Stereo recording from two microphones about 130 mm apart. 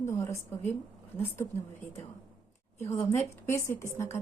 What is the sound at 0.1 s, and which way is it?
Speech, 20° left (ahead or behind).